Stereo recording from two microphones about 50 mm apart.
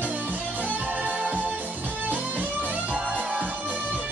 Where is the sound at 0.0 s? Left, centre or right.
Right.